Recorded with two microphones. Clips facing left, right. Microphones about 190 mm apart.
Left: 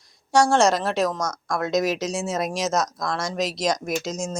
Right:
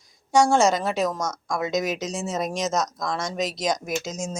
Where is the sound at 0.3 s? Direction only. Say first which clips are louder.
Even; centre (ahead or behind).